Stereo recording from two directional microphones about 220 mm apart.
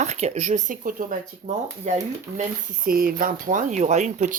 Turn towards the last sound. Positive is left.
turn(degrees=-35)  # may be behind; listen again after turning